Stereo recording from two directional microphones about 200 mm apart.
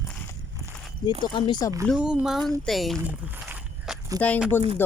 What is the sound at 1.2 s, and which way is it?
Speech, 25° left (ahead or behind).